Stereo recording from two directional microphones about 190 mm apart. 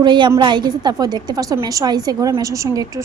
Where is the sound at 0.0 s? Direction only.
25° right (ahead or behind).